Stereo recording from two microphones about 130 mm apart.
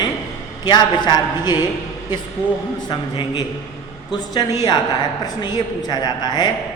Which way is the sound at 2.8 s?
35° left (ahead or behind).